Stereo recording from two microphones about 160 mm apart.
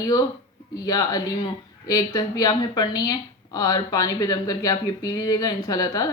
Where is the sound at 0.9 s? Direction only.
25° left (ahead or behind).